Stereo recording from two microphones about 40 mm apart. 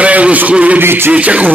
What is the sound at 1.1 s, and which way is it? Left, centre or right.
Speech, right.